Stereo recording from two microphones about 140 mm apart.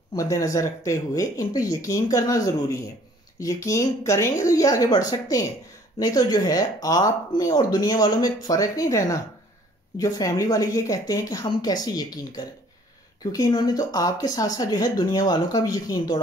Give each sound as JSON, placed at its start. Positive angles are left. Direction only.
{"t": 0.1, "sound": "speech", "side_deg": 25}